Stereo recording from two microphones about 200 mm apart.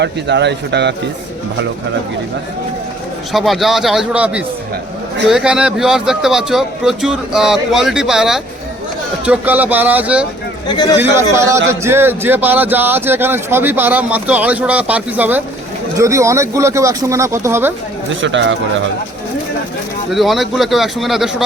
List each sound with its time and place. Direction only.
0.0 s speech: 60° right (ahead or behind)
3.3 s speech: centre (ahead or behind)
11.3 s speech: 15° right (ahead or behind)
18.2 s speech: 65° right (ahead or behind)
20.1 s speech: centre (ahead or behind)